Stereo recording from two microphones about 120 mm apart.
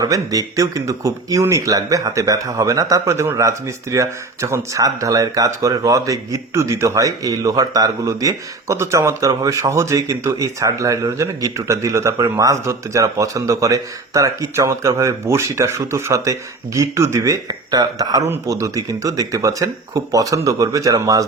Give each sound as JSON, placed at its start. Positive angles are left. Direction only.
{"t": 0.0, "sound": "speech", "side_deg": -30}